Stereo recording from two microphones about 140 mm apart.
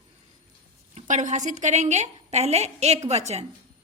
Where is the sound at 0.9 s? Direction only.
65° right (ahead or behind).